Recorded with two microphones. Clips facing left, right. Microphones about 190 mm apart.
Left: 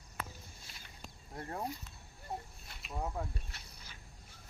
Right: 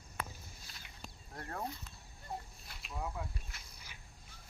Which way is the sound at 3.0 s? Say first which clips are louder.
Left 3 dB; 40° left (ahead or behind).